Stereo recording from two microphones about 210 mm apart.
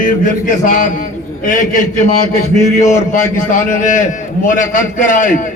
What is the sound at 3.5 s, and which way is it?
A man's voice, 40° left (ahead or behind).